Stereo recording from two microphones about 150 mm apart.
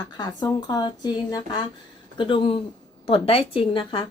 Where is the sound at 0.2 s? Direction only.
25° left (ahead or behind).